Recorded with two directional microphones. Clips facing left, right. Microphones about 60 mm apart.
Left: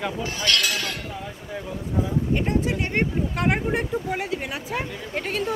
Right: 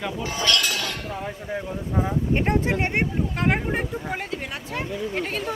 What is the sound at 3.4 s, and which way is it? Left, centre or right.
Speech, centre.